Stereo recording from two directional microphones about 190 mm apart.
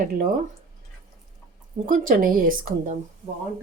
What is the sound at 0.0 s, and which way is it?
Speech, 45° right (ahead or behind).